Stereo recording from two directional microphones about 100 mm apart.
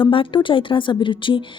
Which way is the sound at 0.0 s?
60° left (ahead or behind).